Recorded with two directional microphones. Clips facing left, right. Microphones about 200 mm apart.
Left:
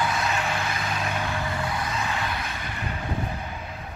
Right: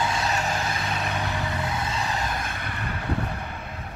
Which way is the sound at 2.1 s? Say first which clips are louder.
Right 1 dB; 40° right (ahead or behind).